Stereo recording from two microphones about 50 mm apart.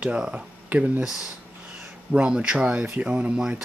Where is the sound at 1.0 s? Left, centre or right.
Centre.